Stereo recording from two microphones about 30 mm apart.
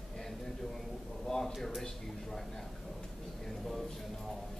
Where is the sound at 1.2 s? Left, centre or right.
Centre.